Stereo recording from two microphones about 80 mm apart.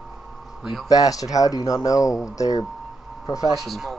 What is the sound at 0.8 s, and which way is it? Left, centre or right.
Speech, left.